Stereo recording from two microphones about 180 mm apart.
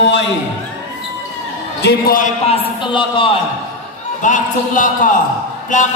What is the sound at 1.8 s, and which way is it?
Speech, 50° left (ahead or behind).